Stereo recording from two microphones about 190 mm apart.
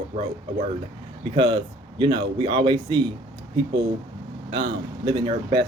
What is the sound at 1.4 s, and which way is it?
Speech, 25° right (ahead or behind).